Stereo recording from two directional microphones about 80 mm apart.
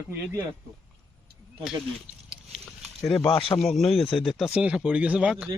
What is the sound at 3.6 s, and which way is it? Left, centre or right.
Speech, centre.